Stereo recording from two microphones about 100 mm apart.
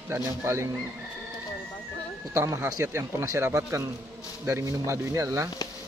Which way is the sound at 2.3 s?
35° right (ahead or behind).